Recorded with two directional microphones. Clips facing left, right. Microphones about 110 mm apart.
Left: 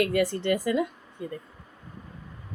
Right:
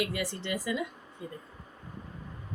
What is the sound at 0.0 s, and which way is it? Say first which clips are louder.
Speech: left 9 dB; 50° left (ahead or behind).